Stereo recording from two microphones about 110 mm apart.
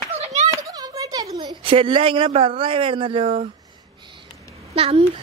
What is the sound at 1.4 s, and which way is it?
Speech, 50° right (ahead or behind).